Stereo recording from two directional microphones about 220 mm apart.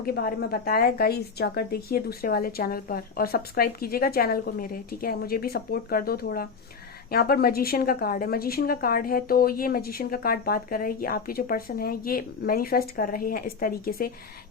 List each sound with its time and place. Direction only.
0.0 s a woman's voice: 45° left (ahead or behind)